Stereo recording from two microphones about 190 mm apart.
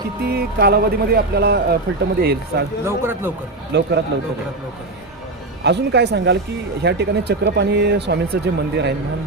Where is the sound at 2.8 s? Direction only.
10° right (ahead or behind).